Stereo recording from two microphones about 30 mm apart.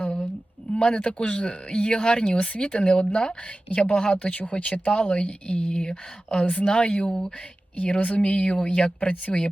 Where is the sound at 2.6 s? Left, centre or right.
Left.